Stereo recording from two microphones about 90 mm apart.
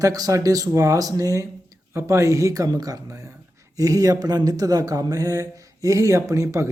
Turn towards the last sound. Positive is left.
turn(degrees=-35)  # may be behind; listen again after turning